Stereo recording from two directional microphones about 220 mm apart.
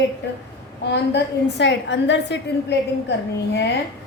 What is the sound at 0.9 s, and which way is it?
A woman's voice, 50° left (ahead or behind).